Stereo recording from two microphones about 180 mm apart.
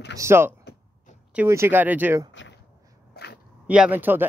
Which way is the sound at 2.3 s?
90° left.